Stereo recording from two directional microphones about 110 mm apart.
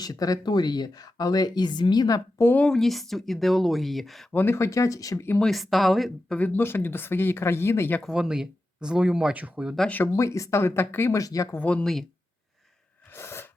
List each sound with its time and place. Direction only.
0.0 s speech: 35° left (ahead or behind)
2.4 s speech: 20° left (ahead or behind)
2.6 s speech: 5° left (ahead or behind)
4.3 s speech: 20° left (ahead or behind)
5.4 s speech: centre (ahead or behind); by 8.0 s 20° left (ahead or behind)
8.0 s speech: 5° right (ahead or behind)
9.9 s speech: 25° left (ahead or behind)
11.5 s speech: 10° left (ahead or behind)
13.1 s a sound: 20° left (ahead or behind)